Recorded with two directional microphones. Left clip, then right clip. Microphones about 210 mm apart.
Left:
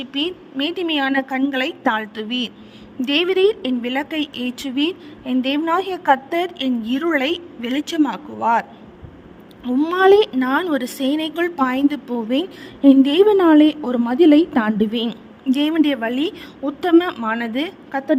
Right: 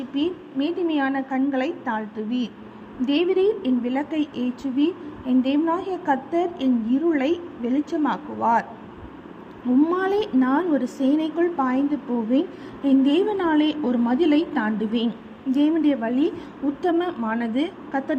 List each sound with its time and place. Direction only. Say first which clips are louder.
0.1 s a woman's voice: left 2 dB; 50° left (ahead or behind)
9.8 s a woman's voice: left 12 dB; 50° left (ahead or behind)